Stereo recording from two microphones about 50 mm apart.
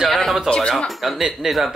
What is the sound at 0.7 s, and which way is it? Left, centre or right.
Speech, centre.